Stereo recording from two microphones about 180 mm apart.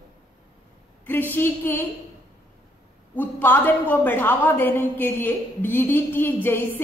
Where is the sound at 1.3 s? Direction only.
10° left (ahead or behind).